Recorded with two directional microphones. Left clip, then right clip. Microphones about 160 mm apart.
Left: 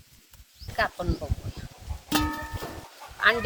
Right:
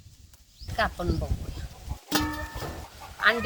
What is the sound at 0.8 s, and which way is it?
Speech, 20° left (ahead or behind).